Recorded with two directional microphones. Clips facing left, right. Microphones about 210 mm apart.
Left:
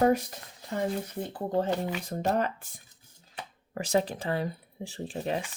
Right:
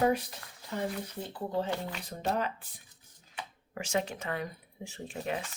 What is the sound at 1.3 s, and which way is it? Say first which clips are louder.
Speech: left 5 dB; 50° left (ahead or behind).